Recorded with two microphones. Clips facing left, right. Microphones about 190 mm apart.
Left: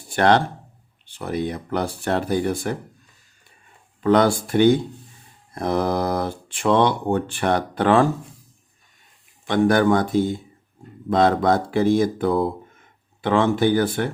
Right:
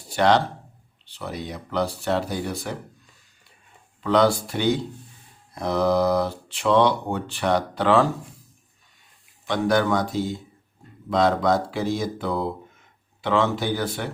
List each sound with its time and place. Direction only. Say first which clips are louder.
0.1 s speech: left 2 dB; 55° left (ahead or behind)
4.0 s speech: left 2 dB; 50° left (ahead or behind)
9.5 s speech: left 4 dB; 55° left (ahead or behind)